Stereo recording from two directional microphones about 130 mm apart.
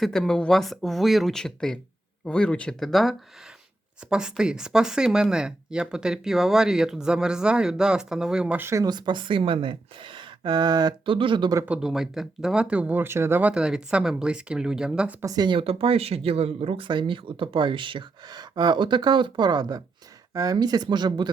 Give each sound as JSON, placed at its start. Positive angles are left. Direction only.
{"t": 0.0, "sound": "speech", "side_deg": 5}
{"t": 11.6, "sound": "speech", "side_deg": -5}
{"t": 15.2, "sound": "speech", "side_deg": -30}